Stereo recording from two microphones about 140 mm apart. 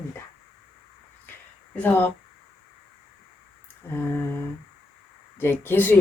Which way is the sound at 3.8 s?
15° left (ahead or behind).